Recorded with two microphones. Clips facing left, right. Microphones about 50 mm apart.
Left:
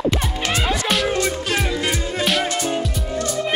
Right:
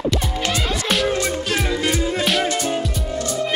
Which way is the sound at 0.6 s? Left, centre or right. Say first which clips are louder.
Left 2 dB; centre.